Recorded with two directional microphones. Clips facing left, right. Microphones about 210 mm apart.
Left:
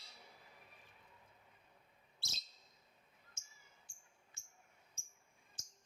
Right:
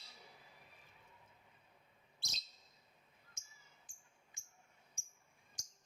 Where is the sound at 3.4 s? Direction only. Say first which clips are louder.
Even; 15° right (ahead or behind).